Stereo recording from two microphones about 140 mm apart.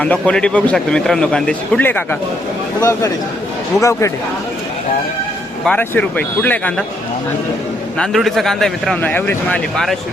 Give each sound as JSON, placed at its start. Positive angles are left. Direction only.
{"t": 0.0, "sound": "a man's voice", "side_deg": 10}
{"t": 3.8, "sound": "speech", "side_deg": 25}
{"t": 5.6, "sound": "a man's voice", "side_deg": 10}
{"t": 7.9, "sound": "a man's voice", "side_deg": 5}
{"t": 9.0, "sound": "a man's voice", "side_deg": 15}